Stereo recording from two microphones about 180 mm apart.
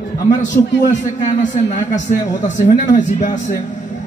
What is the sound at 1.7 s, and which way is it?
Speech, 45° left (ahead or behind).